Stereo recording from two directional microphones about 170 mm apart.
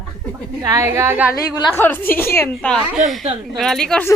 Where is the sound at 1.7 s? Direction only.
10° left (ahead or behind).